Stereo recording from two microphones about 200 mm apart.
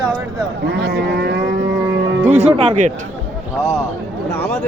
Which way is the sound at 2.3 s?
30° right (ahead or behind).